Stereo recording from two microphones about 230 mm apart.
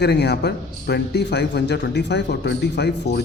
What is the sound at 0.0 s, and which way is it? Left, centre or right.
A man's voice, left.